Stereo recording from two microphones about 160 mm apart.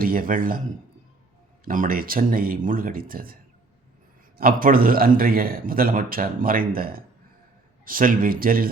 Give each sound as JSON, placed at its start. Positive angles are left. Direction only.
{"t": 0.0, "sound": "a man's voice", "side_deg": -60}
{"t": 1.6, "sound": "a man's voice", "side_deg": -60}
{"t": 4.4, "sound": "a man's voice", "side_deg": -65}